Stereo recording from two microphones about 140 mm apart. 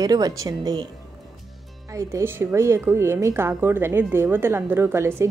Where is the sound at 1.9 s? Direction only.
20° right (ahead or behind).